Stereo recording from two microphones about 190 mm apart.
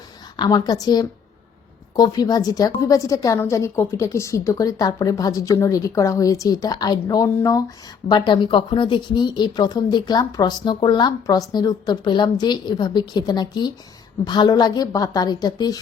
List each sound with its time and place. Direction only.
0.3 s a woman's voice: 25° left (ahead or behind)